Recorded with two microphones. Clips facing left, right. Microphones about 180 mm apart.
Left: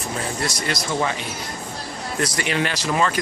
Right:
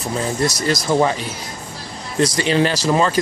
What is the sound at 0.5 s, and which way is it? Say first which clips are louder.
Speech: right 7 dB; 35° right (ahead or behind).